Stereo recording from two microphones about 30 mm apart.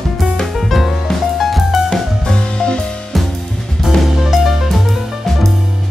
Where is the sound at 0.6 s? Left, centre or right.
Centre.